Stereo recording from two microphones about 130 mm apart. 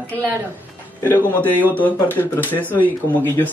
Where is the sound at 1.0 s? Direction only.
15° left (ahead or behind).